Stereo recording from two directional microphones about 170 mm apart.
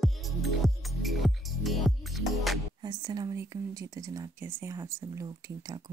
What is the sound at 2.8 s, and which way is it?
Speech, 25° right (ahead or behind).